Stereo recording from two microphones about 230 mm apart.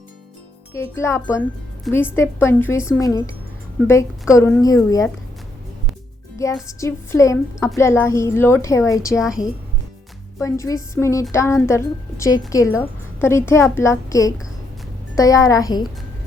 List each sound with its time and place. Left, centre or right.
0.7 s a woman's voice: centre
6.4 s a woman's voice: centre
10.4 s a woman's voice: centre